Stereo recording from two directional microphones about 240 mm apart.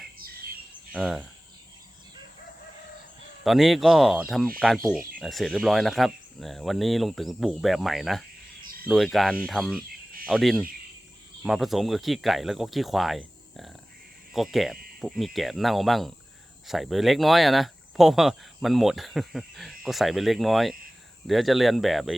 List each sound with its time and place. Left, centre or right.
0.9 s speech: centre
3.4 s speech: centre